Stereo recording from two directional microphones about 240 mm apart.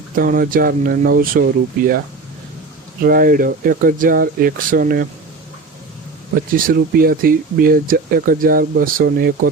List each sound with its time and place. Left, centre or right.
0.2 s speech: right
3.0 s speech: right
6.3 s speech: right